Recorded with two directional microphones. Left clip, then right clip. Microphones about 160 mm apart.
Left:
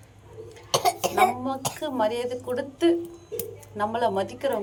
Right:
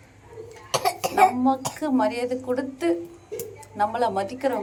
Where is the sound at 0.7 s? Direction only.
35° left (ahead or behind).